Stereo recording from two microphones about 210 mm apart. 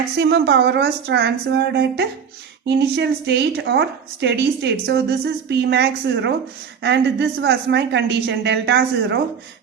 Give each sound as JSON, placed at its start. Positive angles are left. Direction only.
{"t": 0.2, "sound": "a woman's voice", "side_deg": -55}